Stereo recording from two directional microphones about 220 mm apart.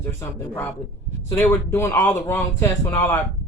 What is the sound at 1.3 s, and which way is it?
Speech, 10° left (ahead or behind).